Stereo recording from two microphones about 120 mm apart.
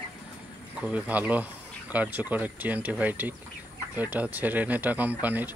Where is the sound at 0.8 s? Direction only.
10° right (ahead or behind).